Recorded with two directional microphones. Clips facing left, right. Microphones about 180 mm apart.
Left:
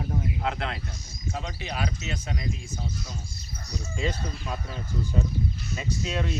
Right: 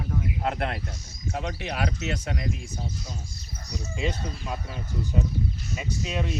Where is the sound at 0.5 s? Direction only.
50° right (ahead or behind).